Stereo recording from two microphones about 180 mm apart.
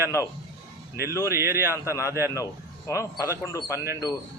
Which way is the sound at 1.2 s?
15° right (ahead or behind).